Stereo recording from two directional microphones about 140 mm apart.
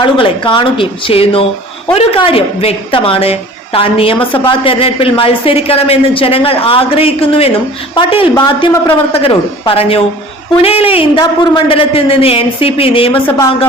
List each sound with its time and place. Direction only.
0.0 s a woman's voice: 35° left (ahead or behind)